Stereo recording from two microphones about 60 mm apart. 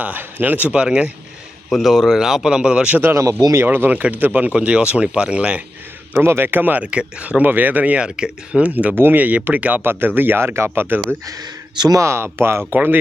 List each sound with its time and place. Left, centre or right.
0.0 s speech: right
1.7 s speech: centre
3.7 s speech: right
6.1 s speech: right
6.8 s speech: centre; by 11.0 s right
12.0 s speech: right
12.7 s speech: right